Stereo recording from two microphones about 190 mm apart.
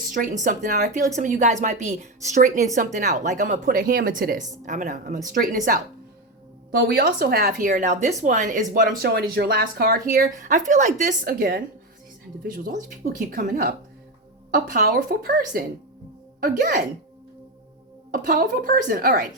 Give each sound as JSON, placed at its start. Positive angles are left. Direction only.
{"t": 0.4, "sound": "a woman's voice", "side_deg": -45}
{"t": 18.1, "sound": "speech", "side_deg": -45}